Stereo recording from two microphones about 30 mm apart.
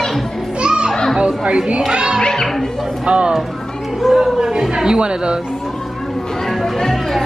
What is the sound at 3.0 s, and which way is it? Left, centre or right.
Speech, right.